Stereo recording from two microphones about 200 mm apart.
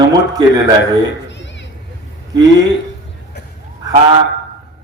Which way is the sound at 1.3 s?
60° left (ahead or behind).